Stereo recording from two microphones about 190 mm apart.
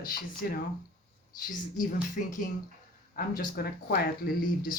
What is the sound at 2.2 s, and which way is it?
Speech, 45° left (ahead or behind).